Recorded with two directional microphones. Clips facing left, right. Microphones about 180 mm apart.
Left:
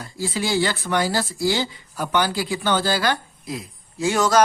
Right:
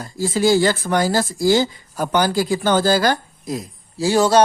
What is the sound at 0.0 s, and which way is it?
Speech, 45° right (ahead or behind).